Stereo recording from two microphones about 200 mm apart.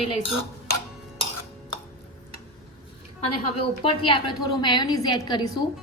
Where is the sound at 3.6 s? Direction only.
25° left (ahead or behind).